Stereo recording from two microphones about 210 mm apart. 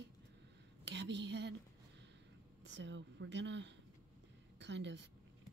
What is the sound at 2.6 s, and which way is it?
Speech, 60° right (ahead or behind).